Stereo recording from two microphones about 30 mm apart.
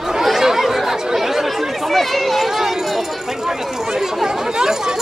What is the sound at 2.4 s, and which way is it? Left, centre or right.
Run, centre.